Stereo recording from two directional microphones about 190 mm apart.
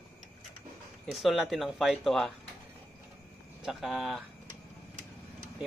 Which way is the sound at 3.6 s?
Centre (ahead or behind).